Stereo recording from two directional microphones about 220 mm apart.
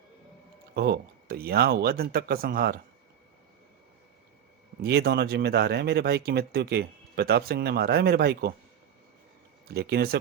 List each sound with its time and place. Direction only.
0.7 s speech: 45° right (ahead or behind)
4.8 s speech: 50° right (ahead or behind)
9.6 s speech: 45° right (ahead or behind)